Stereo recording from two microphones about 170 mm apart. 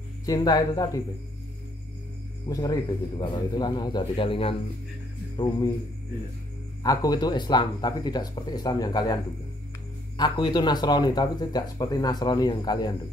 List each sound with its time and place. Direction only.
0.2 s speech: 20° left (ahead or behind)
2.5 s speech: 20° left (ahead or behind)
6.8 s speech: 20° left (ahead or behind)